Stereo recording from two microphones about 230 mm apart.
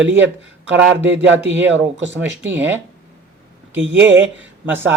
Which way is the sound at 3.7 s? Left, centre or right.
Right.